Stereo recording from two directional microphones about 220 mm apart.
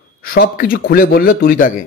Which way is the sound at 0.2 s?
40° left (ahead or behind).